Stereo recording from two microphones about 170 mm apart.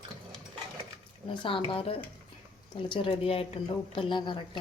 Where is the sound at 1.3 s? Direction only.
30° left (ahead or behind).